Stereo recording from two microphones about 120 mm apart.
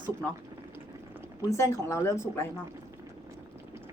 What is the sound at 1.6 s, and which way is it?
Speech, 25° left (ahead or behind).